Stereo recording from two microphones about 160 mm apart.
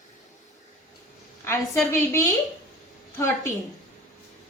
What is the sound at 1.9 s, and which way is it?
A woman's voice, 15° left (ahead or behind).